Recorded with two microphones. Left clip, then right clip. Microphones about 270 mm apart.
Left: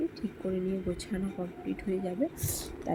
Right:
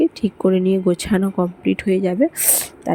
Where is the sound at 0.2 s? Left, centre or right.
Right.